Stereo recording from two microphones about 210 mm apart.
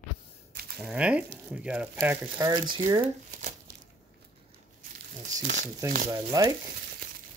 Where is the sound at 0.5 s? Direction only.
50° right (ahead or behind).